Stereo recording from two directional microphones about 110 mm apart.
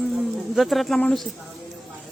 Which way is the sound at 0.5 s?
Centre (ahead or behind).